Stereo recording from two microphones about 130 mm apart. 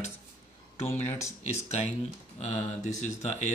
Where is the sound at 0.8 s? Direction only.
20° left (ahead or behind).